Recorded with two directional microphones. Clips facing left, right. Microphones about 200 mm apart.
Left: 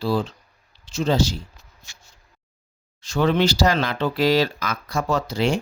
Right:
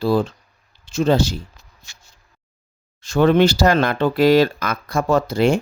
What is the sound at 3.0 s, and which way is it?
Speech, 55° right (ahead or behind).